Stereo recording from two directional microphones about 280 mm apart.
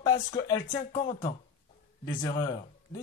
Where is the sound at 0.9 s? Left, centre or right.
Left.